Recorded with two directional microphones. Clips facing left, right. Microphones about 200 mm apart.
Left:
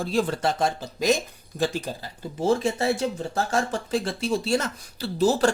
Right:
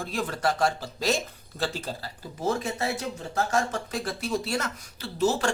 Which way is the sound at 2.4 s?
30° left (ahead or behind).